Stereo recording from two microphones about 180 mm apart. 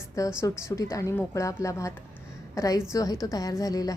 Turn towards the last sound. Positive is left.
turn(degrees=20)  # may be behind; listen again after turning